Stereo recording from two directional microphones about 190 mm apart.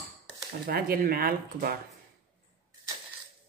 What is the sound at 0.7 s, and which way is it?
A woman's voice, 50° right (ahead or behind).